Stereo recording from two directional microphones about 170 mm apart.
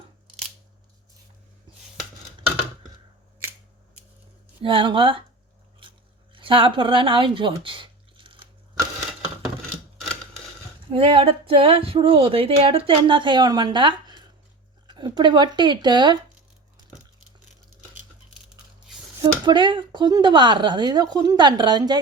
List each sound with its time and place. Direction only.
4.6 s speech: 30° right (ahead or behind)
6.3 s a sound: 30° right (ahead or behind)
10.9 s speech: 30° right (ahead or behind)
19.2 s speech: 25° right (ahead or behind)